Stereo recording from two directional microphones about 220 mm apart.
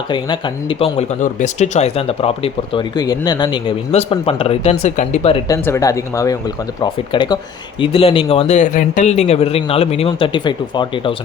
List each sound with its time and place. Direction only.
0.1 s speech: 20° left (ahead or behind)
5.5 s speech: 15° left (ahead or behind)